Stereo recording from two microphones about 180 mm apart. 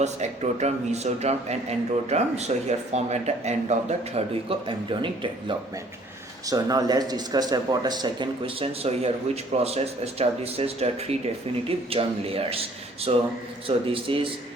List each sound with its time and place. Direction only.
0.0 s speech: 40° right (ahead or behind)